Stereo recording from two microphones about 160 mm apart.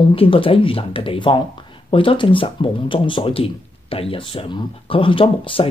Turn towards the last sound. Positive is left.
turn(degrees=35)  # may be behind; listen again after turning